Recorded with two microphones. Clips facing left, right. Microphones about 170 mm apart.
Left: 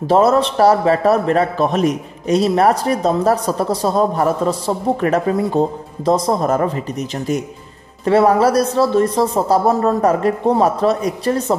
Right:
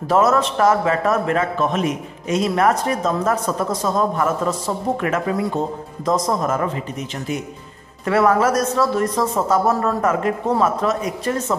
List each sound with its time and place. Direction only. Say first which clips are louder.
0.1 s a man's voice: left 3 dB; 30° left (ahead or behind)
8.0 s a man's voice: left 4 dB; 30° left (ahead or behind)